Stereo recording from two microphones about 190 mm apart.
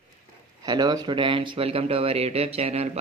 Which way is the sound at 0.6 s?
20° right (ahead or behind).